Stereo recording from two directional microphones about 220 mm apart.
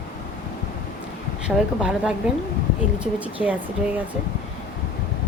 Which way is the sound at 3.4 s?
5° right (ahead or behind).